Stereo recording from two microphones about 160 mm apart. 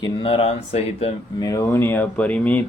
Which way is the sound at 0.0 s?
35° left (ahead or behind).